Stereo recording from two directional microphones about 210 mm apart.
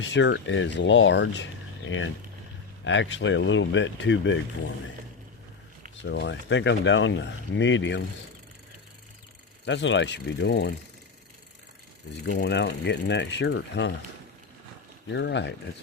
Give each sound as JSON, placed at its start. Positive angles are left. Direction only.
{"t": 0.0, "sound": "speech", "side_deg": 60}
{"t": 6.0, "sound": "speech", "side_deg": 55}
{"t": 9.6, "sound": "speech", "side_deg": 60}
{"t": 12.3, "sound": "speech", "side_deg": 50}
{"t": 15.0, "sound": "speech", "side_deg": 55}